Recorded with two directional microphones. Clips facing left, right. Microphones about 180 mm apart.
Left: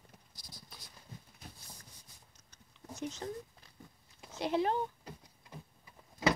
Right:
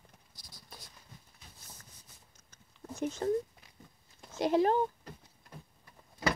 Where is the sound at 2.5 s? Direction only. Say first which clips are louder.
Right 4 dB; 50° right (ahead or behind).